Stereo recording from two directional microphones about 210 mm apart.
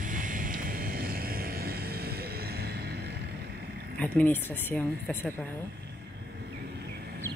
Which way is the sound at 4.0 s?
5° left (ahead or behind).